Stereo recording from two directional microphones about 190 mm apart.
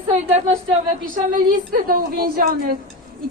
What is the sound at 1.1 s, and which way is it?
Speech, 45° right (ahead or behind).